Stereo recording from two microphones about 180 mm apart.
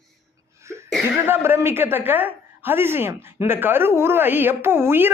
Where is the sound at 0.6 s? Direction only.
15° right (ahead or behind).